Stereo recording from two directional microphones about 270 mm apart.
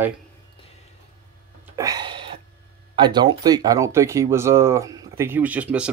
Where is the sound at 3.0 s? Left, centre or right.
Centre.